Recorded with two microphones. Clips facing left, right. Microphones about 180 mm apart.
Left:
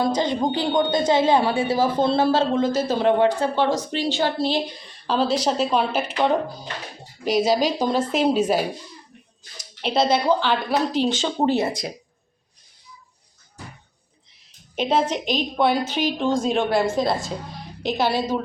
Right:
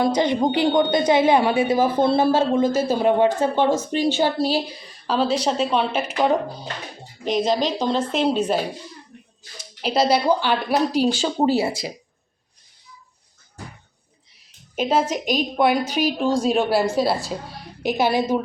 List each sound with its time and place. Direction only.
0.0 s a woman's voice: 20° right (ahead or behind)
4.4 s a woman's voice: 5° right (ahead or behind)
7.3 s a woman's voice: 5° left (ahead or behind)
9.8 s a woman's voice: 5° right (ahead or behind)
14.8 s a woman's voice: 5° right (ahead or behind)